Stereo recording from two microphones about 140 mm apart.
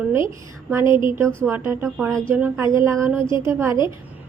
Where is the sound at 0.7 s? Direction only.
20° right (ahead or behind).